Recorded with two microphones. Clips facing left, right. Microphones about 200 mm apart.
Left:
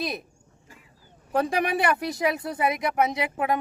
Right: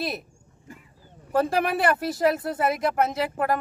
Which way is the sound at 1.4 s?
Centre (ahead or behind).